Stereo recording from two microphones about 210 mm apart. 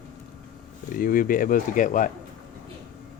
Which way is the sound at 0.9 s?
40° left (ahead or behind).